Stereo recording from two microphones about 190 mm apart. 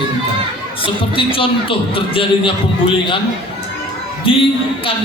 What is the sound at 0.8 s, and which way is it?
A man's voice, 30° left (ahead or behind).